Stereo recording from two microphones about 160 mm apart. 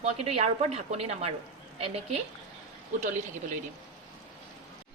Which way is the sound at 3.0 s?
50° right (ahead or behind).